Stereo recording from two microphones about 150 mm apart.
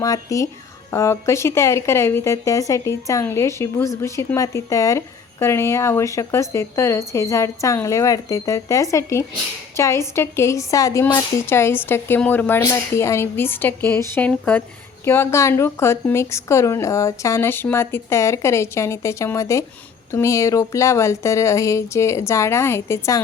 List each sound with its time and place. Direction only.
0.0 s a woman's voice: 20° left (ahead or behind)